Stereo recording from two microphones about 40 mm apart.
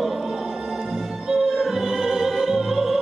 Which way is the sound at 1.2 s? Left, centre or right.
Centre.